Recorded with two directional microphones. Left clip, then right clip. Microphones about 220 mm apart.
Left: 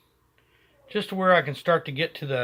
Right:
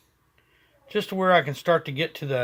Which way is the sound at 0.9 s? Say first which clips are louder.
Even; 25° right (ahead or behind).